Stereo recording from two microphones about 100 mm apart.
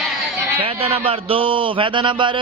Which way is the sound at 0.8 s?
70° right (ahead or behind).